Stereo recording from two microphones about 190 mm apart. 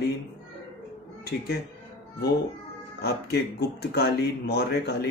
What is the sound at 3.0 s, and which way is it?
Speech, 55° left (ahead or behind).